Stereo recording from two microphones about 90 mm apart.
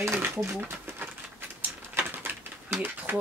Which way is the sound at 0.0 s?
30° right (ahead or behind).